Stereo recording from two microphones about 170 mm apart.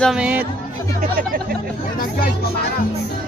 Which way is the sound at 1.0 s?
55° right (ahead or behind).